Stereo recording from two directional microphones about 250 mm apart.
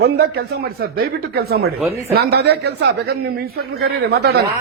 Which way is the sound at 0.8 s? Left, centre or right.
Right.